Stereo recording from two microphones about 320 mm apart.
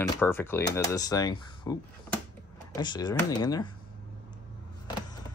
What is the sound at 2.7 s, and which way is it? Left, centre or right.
Speech, centre.